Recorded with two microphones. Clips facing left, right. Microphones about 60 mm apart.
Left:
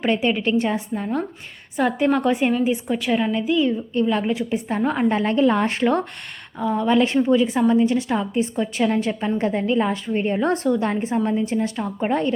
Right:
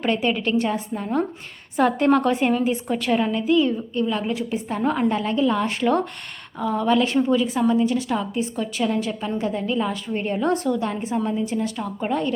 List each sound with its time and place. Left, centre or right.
0.0 s a woman's voice: left
1.7 s a woman's voice: centre
3.3 s a woman's voice: centre
4.1 s a woman's voice: left
4.8 s a woman's voice: centre
5.0 s a woman's voice: left
6.6 s a woman's voice: centre
7.7 s a woman's voice: left